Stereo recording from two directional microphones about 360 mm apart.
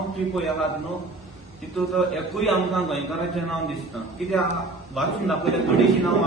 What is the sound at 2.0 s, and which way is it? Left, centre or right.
A man's voice, centre.